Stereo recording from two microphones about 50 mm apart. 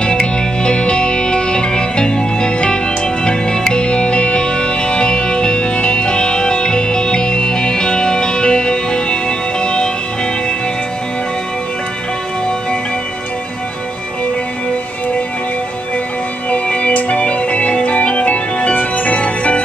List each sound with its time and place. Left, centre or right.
0.0 s music: centre
16.4 s music: left